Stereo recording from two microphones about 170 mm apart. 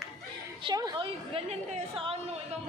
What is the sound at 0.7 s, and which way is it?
A woman's voice, 25° right (ahead or behind).